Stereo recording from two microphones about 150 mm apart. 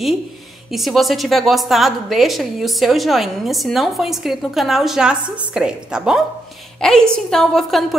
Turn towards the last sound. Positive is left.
turn(degrees=0)  # may be behind; listen again after turning